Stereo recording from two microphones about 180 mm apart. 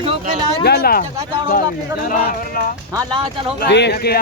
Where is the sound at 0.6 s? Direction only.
60° left (ahead or behind).